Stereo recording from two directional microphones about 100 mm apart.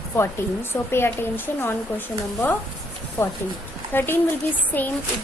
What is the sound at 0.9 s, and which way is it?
A woman's voice, 25° left (ahead or behind).